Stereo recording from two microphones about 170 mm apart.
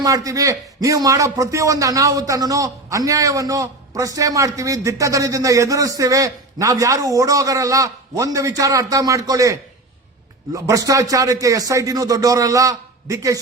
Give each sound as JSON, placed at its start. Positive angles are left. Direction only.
{"t": 0.0, "sound": "a man's voice", "side_deg": -20}